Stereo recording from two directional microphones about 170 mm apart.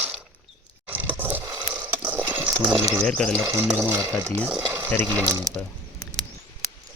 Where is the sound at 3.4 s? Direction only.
15° right (ahead or behind).